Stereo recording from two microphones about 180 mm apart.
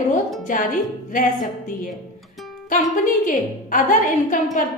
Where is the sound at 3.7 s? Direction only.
45° left (ahead or behind).